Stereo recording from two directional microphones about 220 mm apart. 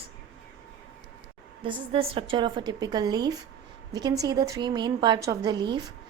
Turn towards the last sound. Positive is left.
turn(degrees=-20)  # may be behind; listen again after turning